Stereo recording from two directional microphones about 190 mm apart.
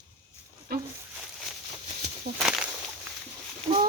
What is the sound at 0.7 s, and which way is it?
Speech, 55° right (ahead or behind).